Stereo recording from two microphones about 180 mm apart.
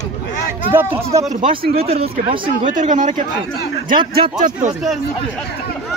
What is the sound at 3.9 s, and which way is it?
Speech, 30° right (ahead or behind).